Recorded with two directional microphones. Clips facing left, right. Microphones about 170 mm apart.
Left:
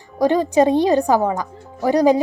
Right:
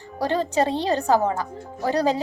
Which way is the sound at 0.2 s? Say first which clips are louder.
Left 7 dB; 15° left (ahead or behind).